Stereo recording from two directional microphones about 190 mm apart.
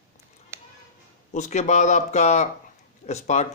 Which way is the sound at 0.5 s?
15° right (ahead or behind).